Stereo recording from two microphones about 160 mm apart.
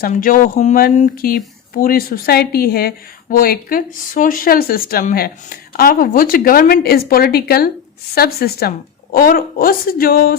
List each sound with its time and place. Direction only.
0.0 s a woman's voice: 60° left (ahead or behind)